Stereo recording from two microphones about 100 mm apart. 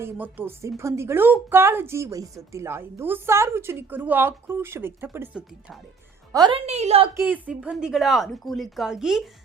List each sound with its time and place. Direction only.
0.0 s a woman's voice: 20° right (ahead or behind)
6.5 s a woman's voice: 90° right
7.1 s speech: 20° right (ahead or behind); by 9.2 s 5° right (ahead or behind)